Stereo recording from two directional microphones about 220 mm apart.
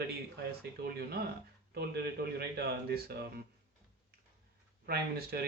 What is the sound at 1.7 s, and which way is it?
Speech, 45° right (ahead or behind).